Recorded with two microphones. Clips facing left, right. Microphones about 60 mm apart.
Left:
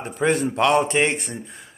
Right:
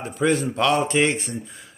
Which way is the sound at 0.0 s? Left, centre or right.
Left.